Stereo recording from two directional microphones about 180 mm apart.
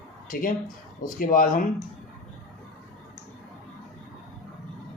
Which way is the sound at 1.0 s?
50° left (ahead or behind).